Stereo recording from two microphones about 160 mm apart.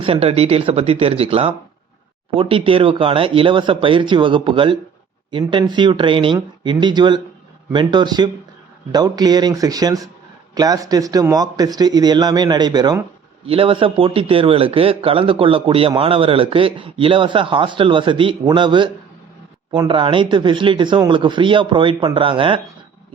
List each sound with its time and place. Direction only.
0.0 s a man's voice: 35° right (ahead or behind)